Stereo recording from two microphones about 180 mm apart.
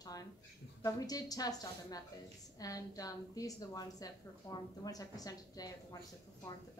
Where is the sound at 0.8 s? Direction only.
20° left (ahead or behind).